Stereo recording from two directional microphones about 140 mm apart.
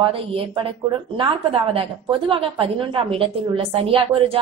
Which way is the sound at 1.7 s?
40° right (ahead or behind).